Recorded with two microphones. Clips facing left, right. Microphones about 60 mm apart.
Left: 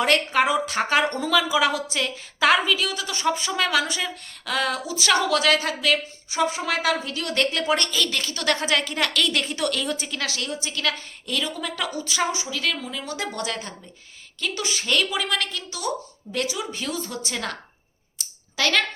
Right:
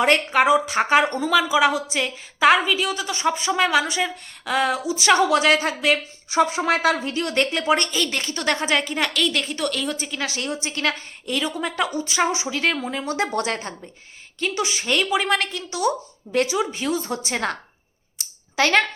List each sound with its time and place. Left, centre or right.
0.0 s a woman's voice: right
0.3 s a woman's voice: centre
6.3 s a woman's voice: right
8.9 s a woman's voice: centre
10.2 s a woman's voice: centre
10.4 s a woman's voice: right
11.3 s a woman's voice: centre
14.5 s a woman's voice: centre; by 16.6 s right
16.7 s a woman's voice: right